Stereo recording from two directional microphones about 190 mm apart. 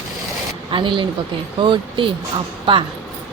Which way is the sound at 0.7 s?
25° right (ahead or behind).